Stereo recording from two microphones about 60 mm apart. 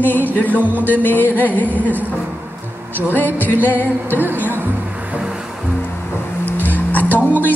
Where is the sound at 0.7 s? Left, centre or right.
Left.